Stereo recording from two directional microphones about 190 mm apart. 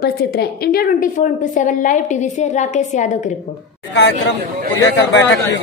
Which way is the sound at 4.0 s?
70° left (ahead or behind).